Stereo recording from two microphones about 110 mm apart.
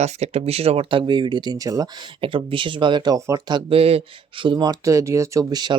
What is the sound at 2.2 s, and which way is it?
Speech, 50° right (ahead or behind).